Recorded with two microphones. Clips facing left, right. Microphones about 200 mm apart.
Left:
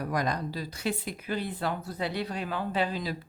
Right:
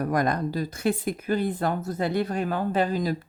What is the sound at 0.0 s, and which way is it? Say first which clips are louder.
Speech: right 6 dB; 50° right (ahead or behind).